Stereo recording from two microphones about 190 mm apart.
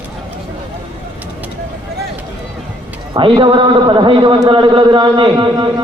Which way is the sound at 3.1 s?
25° right (ahead or behind).